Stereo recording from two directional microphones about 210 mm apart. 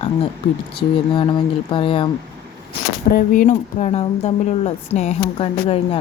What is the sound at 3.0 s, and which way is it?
Speech, 40° left (ahead or behind).